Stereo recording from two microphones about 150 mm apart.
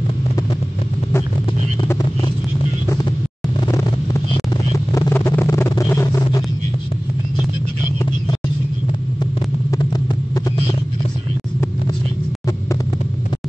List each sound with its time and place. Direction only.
1.9 s vehicle: 25° left (ahead or behind)
4.7 s vehicle: 20° left (ahead or behind)
9.2 s a sound: 25° left (ahead or behind)